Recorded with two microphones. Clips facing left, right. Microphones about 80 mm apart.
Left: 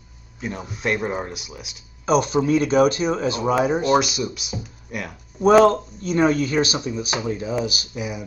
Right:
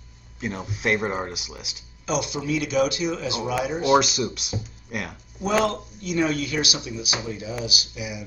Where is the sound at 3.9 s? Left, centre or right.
Centre.